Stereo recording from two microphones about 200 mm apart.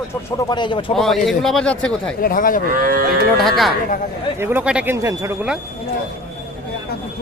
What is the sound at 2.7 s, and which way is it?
Moo, 45° right (ahead or behind).